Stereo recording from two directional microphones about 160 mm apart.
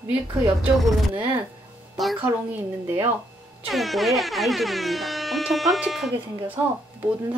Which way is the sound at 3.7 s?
Centre (ahead or behind).